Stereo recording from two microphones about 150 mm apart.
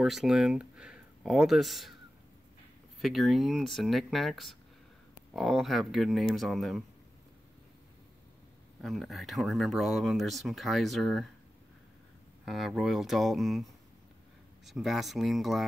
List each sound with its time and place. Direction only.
0.0 s speech: centre (ahead or behind)
3.0 s speech: centre (ahead or behind)
8.8 s speech: centre (ahead or behind)
12.4 s speech: centre (ahead or behind)
14.7 s speech: centre (ahead or behind)